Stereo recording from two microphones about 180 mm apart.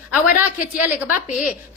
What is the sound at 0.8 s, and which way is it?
Speech, 10° right (ahead or behind).